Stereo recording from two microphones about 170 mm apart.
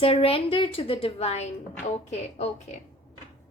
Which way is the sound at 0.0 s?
35° left (ahead or behind).